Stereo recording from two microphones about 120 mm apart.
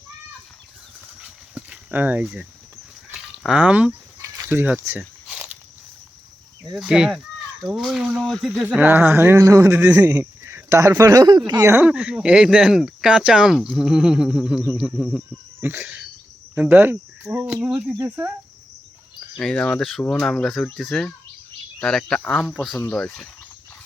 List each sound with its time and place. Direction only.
1.2 s a sound: 10° right (ahead or behind)
4.2 s a sound: 25° right (ahead or behind)
4.4 s speech: 10° right (ahead or behind)
5.3 s a sound: 5° right (ahead or behind)
6.7 s speech: 5° right (ahead or behind); by 9.8 s 25° right (ahead or behind)
9.8 s speech: 15° right (ahead or behind); by 11.7 s 35° right (ahead or behind)
11.7 s speech: 15° right (ahead or behind)
15.6 s speech: 15° right (ahead or behind)
19.4 s speech: 5° left (ahead or behind)